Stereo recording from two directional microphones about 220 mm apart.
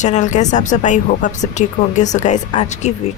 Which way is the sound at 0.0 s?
35° left (ahead or behind).